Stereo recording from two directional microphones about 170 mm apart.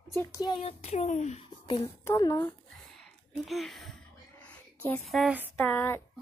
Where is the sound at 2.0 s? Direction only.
15° left (ahead or behind).